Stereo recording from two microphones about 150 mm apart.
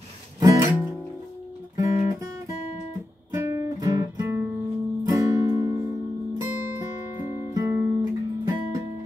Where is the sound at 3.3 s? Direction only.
20° right (ahead or behind).